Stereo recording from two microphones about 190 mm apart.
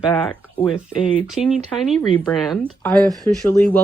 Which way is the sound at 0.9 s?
30° left (ahead or behind).